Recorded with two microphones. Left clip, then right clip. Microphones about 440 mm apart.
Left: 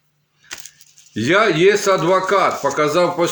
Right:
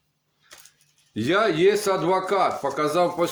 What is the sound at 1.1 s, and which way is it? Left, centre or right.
Speech, right.